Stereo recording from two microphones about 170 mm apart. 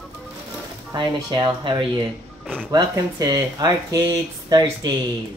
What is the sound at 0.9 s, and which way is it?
Speech, 30° right (ahead or behind).